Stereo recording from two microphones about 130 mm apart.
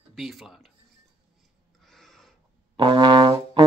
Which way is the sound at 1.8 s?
Centre (ahead or behind).